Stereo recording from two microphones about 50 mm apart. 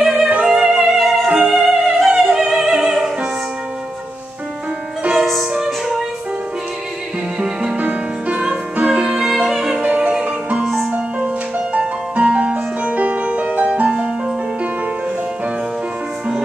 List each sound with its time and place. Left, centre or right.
0.0 s music: centre
0.3 s music: centre
5.1 s music: centre
7.3 s music: centre
9.8 s music: right